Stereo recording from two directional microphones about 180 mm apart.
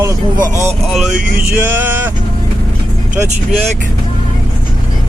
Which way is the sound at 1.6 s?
10° right (ahead or behind).